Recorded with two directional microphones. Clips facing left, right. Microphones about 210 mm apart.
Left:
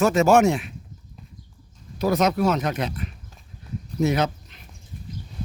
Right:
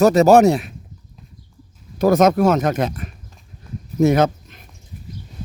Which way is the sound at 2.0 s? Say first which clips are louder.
Right 7 dB; 45° right (ahead or behind).